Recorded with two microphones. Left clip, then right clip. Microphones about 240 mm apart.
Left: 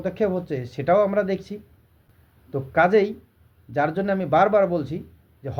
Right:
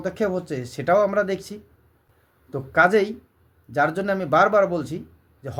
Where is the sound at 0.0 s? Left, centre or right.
Centre.